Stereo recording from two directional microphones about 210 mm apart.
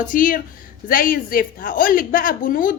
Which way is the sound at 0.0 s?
40° left (ahead or behind).